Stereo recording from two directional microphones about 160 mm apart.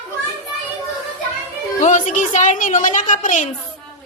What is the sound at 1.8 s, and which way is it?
A woman's voice, 55° left (ahead or behind).